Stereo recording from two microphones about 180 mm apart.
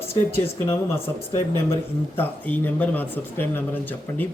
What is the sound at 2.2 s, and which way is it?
Speech, 10° left (ahead or behind).